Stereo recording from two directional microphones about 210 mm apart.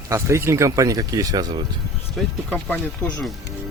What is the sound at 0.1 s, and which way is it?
Speech, 15° right (ahead or behind).